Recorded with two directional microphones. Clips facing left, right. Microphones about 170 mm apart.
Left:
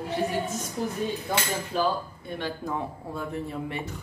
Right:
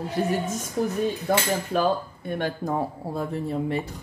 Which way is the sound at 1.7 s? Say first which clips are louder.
Right 2 dB; 55° right (ahead or behind).